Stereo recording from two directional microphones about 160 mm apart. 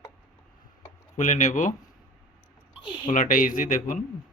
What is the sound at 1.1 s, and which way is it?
Speech, 50° left (ahead or behind).